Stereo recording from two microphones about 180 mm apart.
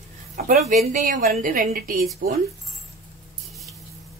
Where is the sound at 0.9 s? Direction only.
45° right (ahead or behind).